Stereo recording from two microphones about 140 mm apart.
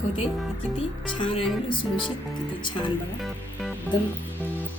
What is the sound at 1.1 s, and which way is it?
Speech, 40° left (ahead or behind).